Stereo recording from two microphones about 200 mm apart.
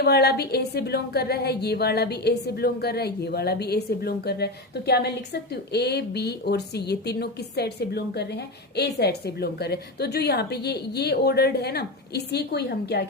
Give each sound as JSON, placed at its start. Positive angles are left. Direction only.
{"t": 0.0, "sound": "a woman's voice", "side_deg": 55}